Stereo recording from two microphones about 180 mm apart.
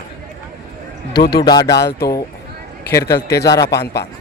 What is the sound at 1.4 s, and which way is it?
Speech, 20° left (ahead or behind).